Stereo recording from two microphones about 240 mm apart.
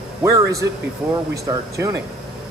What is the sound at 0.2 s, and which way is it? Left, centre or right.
A man's voice, centre.